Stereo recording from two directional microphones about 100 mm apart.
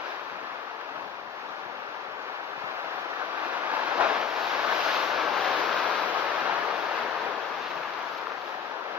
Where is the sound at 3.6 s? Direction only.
15° right (ahead or behind).